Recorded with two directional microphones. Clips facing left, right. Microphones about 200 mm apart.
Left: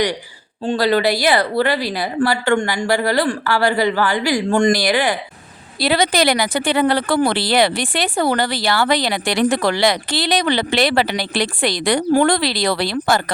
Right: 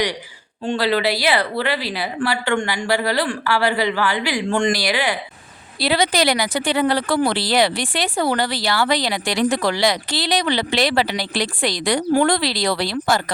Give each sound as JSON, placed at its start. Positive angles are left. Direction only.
{"t": 0.6, "sound": "a woman's voice", "side_deg": 40}